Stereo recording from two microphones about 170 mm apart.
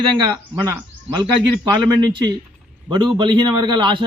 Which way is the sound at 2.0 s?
25° right (ahead or behind).